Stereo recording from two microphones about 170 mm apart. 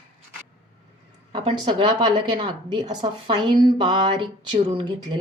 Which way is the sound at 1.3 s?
30° right (ahead or behind).